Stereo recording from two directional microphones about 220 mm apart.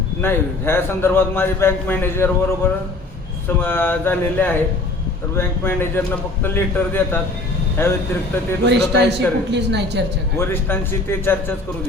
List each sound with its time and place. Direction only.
0.2 s a man's voice: 10° left (ahead or behind)
8.6 s a man's voice: 50° right (ahead or behind)
10.3 s a man's voice: 10° left (ahead or behind)